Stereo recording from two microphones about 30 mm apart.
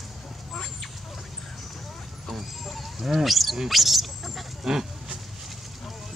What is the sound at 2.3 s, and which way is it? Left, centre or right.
Horse, centre.